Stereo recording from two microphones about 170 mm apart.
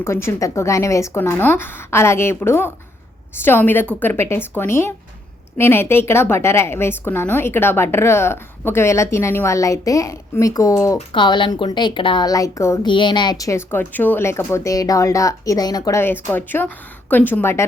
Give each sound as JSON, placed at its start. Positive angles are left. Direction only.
{"t": 0.0, "sound": "a woman's voice", "side_deg": 15}
{"t": 12.9, "sound": "a woman's voice", "side_deg": 30}